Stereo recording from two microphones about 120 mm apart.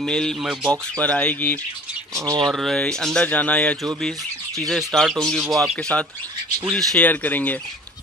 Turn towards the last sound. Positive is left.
turn(degrees=15)  # may be behind; listen again after turning